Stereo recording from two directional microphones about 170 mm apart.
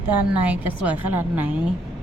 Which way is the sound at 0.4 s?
10° right (ahead or behind).